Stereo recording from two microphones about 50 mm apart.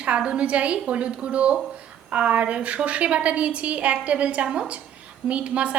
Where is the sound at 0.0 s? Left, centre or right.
Right.